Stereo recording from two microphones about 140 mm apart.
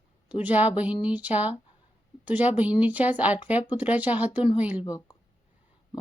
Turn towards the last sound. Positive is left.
turn(degrees=25)  # may be behind; listen again after turning